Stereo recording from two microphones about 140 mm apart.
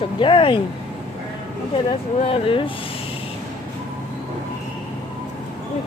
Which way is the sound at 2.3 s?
40° left (ahead or behind).